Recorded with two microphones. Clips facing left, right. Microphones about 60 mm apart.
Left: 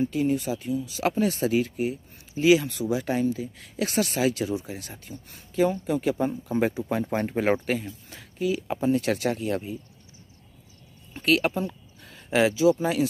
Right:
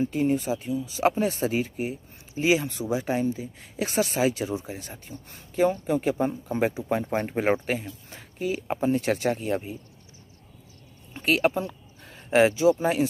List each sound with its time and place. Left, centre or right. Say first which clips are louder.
0.0 s speech: even; right
6.7 s speech: right 1 dB; right
8.1 s speech: left 2 dB; right
11.2 s speech: even; right